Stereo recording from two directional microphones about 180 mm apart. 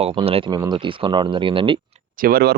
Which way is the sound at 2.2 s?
55° right (ahead or behind).